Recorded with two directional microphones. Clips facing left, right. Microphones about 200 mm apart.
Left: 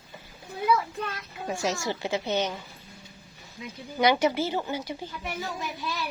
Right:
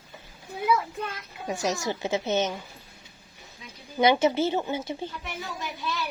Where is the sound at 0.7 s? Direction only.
10° right (ahead or behind).